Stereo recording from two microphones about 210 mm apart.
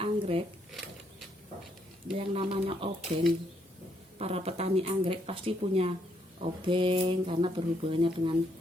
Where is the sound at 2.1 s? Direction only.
25° right (ahead or behind).